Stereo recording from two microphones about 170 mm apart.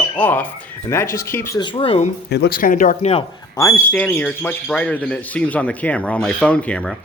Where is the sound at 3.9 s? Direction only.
10° left (ahead or behind).